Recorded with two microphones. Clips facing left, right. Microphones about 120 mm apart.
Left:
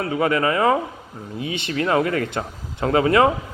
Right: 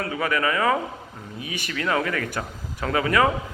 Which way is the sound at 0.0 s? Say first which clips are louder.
Left 4 dB; 25° left (ahead or behind).